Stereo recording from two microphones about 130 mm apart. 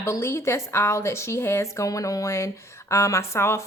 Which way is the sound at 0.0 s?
20° left (ahead or behind).